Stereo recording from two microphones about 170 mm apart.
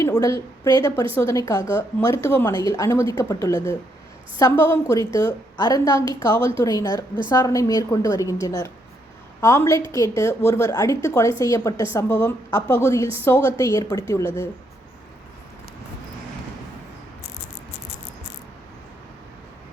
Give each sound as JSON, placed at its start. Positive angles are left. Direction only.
{"t": 0.0, "sound": "a woman's voice", "side_deg": 20}